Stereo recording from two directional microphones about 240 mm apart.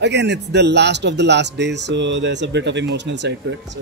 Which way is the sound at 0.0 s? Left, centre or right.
Right.